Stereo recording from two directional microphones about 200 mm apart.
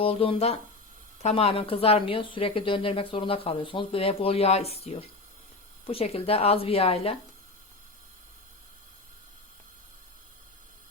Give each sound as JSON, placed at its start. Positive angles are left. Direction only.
{"t": 0.0, "sound": "a woman's voice", "side_deg": 30}